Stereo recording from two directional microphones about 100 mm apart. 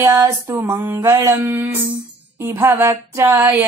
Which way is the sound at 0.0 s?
25° right (ahead or behind).